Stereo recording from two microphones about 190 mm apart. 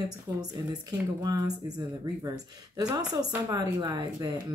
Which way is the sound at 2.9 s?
20° right (ahead or behind).